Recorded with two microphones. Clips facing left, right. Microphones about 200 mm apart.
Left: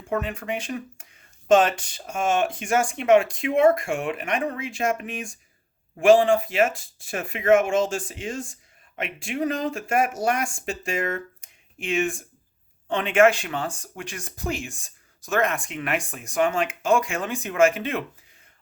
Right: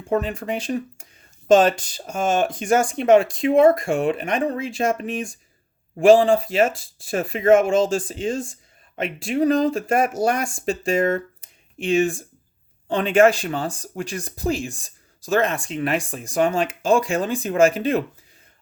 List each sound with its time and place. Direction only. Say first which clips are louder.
0.1 s speech: right 4 dB; 35° right (ahead or behind)